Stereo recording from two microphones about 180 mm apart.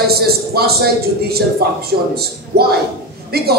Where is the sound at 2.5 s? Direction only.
60° right (ahead or behind).